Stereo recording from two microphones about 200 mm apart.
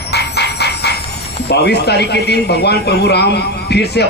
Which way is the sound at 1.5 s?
55° left (ahead or behind).